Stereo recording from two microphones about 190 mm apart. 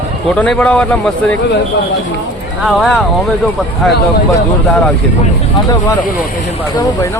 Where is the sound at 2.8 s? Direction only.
Centre (ahead or behind).